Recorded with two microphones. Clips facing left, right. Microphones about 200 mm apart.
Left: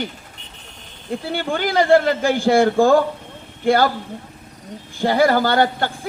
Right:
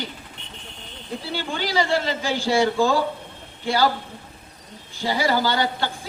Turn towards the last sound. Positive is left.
turn(degrees=55)  # may be behind; listen again after turning